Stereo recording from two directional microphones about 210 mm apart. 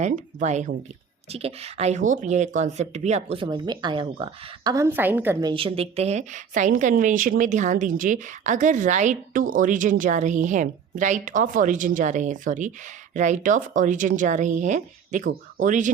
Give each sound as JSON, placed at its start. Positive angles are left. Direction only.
{"t": 0.0, "sound": "speech", "side_deg": -35}